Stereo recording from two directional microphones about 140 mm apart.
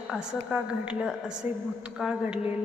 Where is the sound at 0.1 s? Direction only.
5° right (ahead or behind).